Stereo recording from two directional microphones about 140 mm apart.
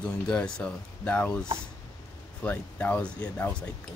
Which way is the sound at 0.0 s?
5° left (ahead or behind).